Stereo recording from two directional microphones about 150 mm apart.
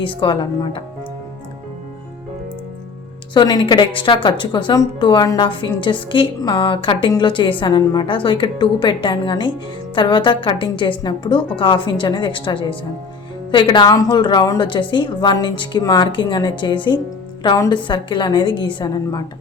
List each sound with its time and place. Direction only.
0.0 s a woman's voice: 35° left (ahead or behind)
3.3 s a woman's voice: 30° left (ahead or behind)